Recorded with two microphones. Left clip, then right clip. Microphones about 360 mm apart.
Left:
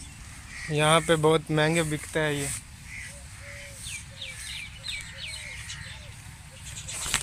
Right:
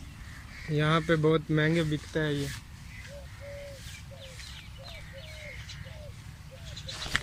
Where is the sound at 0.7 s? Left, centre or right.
Centre.